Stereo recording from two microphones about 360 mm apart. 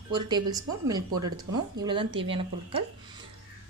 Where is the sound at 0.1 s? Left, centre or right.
Centre.